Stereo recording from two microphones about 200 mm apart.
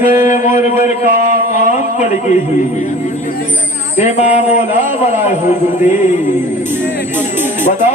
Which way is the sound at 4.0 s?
35° left (ahead or behind).